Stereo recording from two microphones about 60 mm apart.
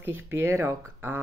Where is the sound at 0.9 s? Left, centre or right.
Right.